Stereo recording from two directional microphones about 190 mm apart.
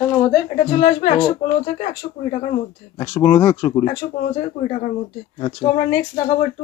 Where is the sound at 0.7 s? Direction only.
40° left (ahead or behind).